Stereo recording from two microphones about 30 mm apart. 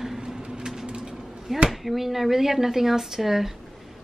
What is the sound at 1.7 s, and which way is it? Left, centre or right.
A woman's voice, centre.